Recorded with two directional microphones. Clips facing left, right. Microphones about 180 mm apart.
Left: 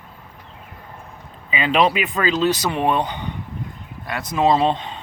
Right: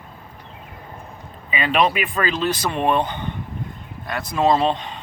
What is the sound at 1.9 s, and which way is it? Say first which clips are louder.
Speech: left 2 dB; 20° left (ahead or behind).